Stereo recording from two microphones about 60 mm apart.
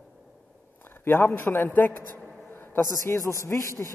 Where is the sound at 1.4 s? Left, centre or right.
Left.